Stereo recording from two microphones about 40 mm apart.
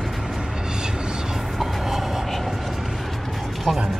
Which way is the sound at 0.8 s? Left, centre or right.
Centre.